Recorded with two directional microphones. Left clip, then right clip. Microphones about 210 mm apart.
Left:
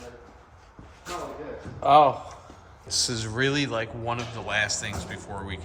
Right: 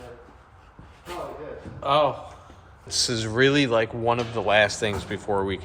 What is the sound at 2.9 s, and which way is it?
Speech, 10° left (ahead or behind).